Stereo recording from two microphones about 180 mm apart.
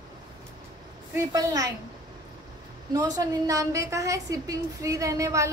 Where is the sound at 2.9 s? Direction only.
20° right (ahead or behind).